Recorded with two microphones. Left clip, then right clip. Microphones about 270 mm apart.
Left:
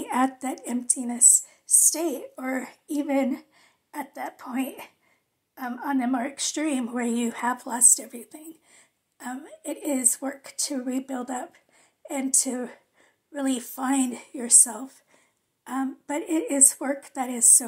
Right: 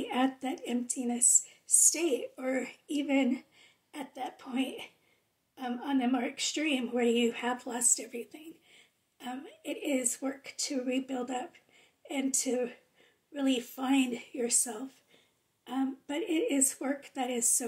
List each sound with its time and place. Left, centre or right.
0.0 s a woman's voice: left
5.8 s speech: centre
9.8 s speech: centre